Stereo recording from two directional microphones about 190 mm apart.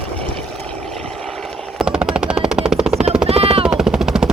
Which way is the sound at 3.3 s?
30° right (ahead or behind).